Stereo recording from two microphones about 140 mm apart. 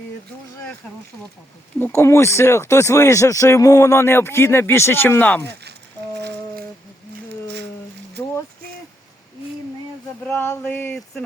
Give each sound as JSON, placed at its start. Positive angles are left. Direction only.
{"t": 1.8, "sound": "speech", "side_deg": 20}
{"t": 10.2, "sound": "male singing", "side_deg": 15}